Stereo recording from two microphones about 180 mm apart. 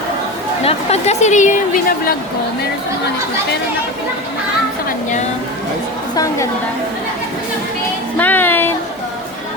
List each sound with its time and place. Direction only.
0.6 s a woman's voice: 35° left (ahead or behind)
8.2 s music: 10° left (ahead or behind)